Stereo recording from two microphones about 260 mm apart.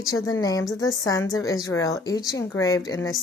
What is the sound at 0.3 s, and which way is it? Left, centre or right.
A woman's voice, centre.